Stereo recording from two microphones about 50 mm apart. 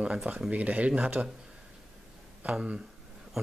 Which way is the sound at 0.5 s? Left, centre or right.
Right.